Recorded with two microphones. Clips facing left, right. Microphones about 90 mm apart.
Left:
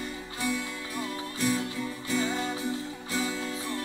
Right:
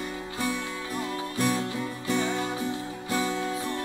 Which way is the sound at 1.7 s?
40° right (ahead or behind).